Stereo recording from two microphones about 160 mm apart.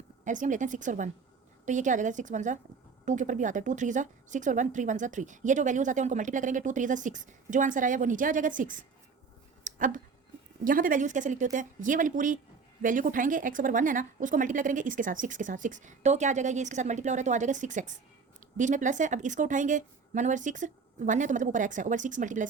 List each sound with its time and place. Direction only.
0.3 s speech: 50° right (ahead or behind)
9.6 s a sound: 55° right (ahead or behind)
10.6 s a woman's voice: 60° right (ahead or behind)